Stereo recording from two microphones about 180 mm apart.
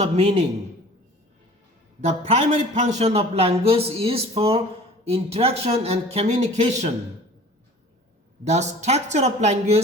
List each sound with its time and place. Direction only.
0.0 s a man's voice: 35° right (ahead or behind)
2.0 s a man's voice: 35° right (ahead or behind)
8.4 s a man's voice: 40° right (ahead or behind)